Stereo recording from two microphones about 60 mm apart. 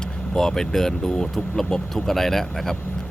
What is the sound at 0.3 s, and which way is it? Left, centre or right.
Speech, centre.